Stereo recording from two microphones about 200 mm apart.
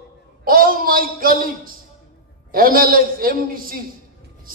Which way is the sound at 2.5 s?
45° right (ahead or behind).